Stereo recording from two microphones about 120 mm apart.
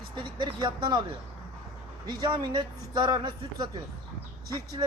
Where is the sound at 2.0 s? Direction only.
35° right (ahead or behind).